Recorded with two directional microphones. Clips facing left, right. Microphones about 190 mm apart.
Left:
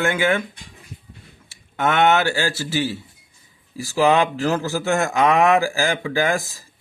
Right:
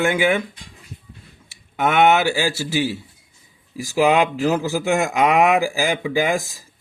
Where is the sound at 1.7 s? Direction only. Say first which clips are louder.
Right 2 dB; 10° right (ahead or behind).